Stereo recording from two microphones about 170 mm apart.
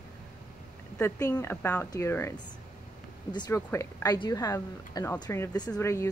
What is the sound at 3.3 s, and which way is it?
Speech, 25° left (ahead or behind).